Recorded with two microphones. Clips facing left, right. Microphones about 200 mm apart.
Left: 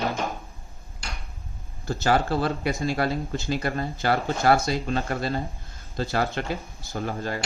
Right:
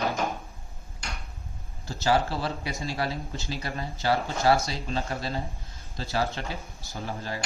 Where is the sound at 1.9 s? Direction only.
55° left (ahead or behind).